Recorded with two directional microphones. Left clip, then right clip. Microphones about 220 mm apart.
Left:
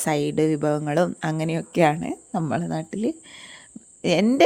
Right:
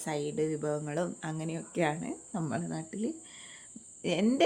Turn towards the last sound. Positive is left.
turn(degrees=40)  # may be behind; listen again after turning